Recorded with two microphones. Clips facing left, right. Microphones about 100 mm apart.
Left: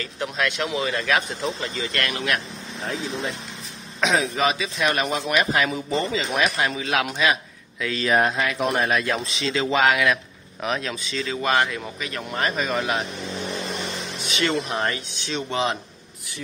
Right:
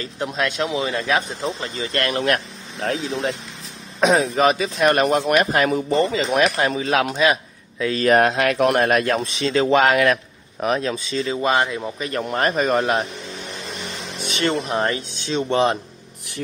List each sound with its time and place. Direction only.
0.0 s speech: 25° right (ahead or behind); by 2.4 s 40° right (ahead or behind)
2.8 s speech: 75° right (ahead or behind)
4.0 s speech: 40° right (ahead or behind)
8.1 s speech: 70° right (ahead or behind); by 11.9 s 25° right (ahead or behind)
12.0 s speech: 40° right (ahead or behind)
14.3 s speech: 35° right (ahead or behind)